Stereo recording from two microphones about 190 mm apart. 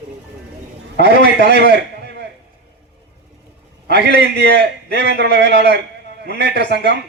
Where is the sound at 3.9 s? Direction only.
60° right (ahead or behind).